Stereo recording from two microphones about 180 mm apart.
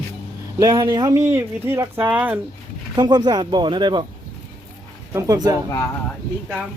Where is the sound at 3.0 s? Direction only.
20° right (ahead or behind).